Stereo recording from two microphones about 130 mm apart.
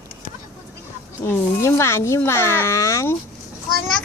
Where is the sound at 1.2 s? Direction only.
20° left (ahead or behind).